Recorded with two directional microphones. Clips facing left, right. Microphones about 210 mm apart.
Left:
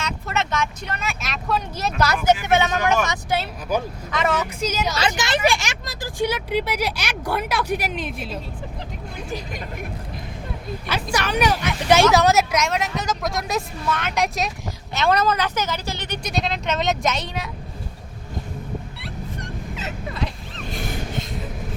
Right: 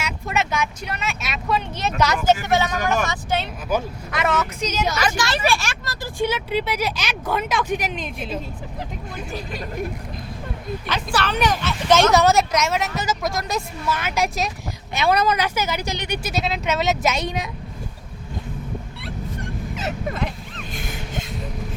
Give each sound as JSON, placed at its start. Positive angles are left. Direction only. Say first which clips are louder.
{"t": 0.0, "sound": "vehicle", "louder": "right 1 dB", "side_deg": -10}
{"t": 2.2, "sound": "speech", "louder": "left 2 dB", "side_deg": 15}
{"t": 4.9, "sound": "speech", "louder": "even", "side_deg": 20}
{"t": 10.8, "sound": "a woman's voice", "louder": "even", "side_deg": 10}
{"t": 19.7, "sound": "vehicle", "louder": "right 6 dB", "side_deg": -45}